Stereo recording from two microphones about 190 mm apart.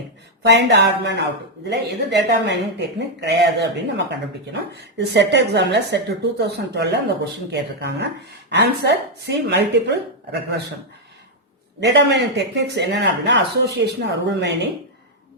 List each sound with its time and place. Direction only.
0.4 s a woman's voice: 65° right (ahead or behind)
11.8 s a woman's voice: 65° right (ahead or behind)